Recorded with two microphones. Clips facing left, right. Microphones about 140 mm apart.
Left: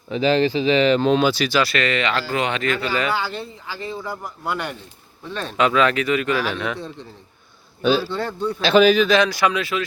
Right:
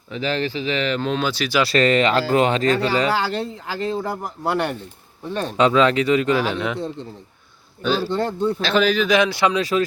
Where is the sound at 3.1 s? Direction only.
90° right.